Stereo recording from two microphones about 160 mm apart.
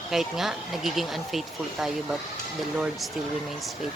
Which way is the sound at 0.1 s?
Centre (ahead or behind).